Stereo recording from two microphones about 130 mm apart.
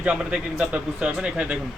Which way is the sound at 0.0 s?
10° right (ahead or behind).